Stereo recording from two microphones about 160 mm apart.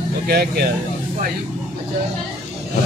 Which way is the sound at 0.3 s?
75° right (ahead or behind).